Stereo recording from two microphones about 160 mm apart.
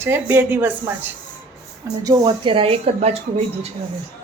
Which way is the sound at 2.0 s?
30° right (ahead or behind).